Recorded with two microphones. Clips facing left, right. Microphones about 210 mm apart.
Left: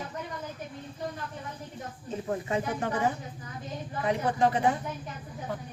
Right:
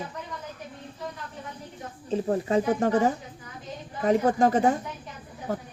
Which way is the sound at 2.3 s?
40° right (ahead or behind).